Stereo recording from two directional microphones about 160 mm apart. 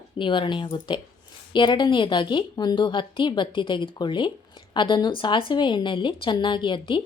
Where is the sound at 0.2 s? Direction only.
30° left (ahead or behind).